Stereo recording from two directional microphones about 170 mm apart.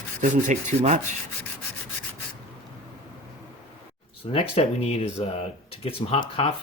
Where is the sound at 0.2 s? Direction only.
45° right (ahead or behind).